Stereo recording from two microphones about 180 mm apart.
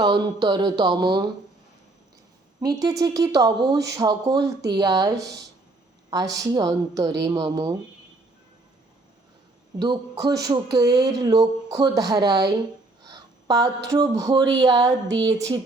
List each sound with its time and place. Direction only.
0.0 s speech: 25° right (ahead or behind)
2.6 s speech: 20° right (ahead or behind)
9.7 s speech: 25° right (ahead or behind)
13.1 s a sound: 20° right (ahead or behind)
13.9 s speech: 20° right (ahead or behind)